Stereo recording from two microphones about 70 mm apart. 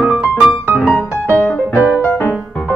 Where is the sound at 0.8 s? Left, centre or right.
Left.